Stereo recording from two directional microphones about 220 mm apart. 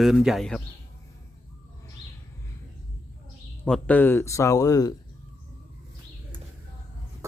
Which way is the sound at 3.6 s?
5° left (ahead or behind).